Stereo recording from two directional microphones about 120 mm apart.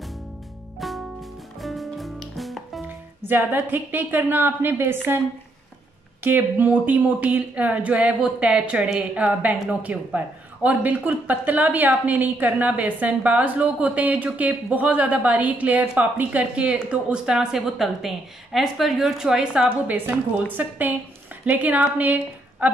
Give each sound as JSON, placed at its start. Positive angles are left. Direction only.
{"t": 0.7, "sound": "music", "side_deg": 0}
{"t": 2.9, "sound": "speech", "side_deg": -15}
{"t": 6.2, "sound": "a woman's voice", "side_deg": -15}